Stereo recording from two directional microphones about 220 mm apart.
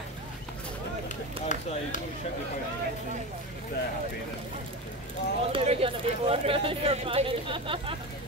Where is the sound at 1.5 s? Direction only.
35° left (ahead or behind).